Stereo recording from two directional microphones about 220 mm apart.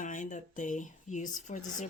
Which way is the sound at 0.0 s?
35° left (ahead or behind).